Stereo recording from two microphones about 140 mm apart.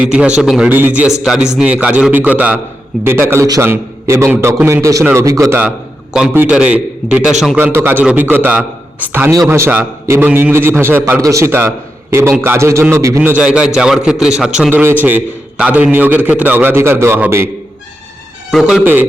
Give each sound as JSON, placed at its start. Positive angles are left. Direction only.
{"t": 0.0, "sound": "a man's voice", "side_deg": -10}
{"t": 7.6, "sound": "a man's voice", "side_deg": -15}
{"t": 18.5, "sound": "a man's voice", "side_deg": -5}